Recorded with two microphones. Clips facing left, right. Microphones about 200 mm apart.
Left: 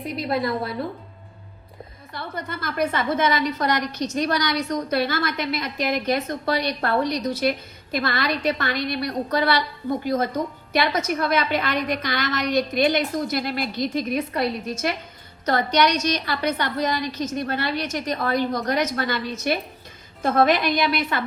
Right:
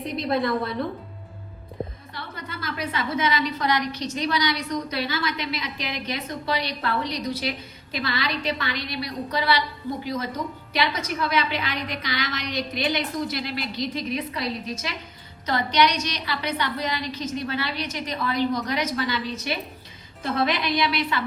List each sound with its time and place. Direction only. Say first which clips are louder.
0.1 s a woman's voice: even; 5° left (ahead or behind)
2.1 s a woman's voice: left 5 dB; 50° left (ahead or behind)